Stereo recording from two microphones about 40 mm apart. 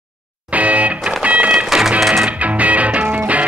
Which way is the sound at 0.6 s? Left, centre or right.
Right.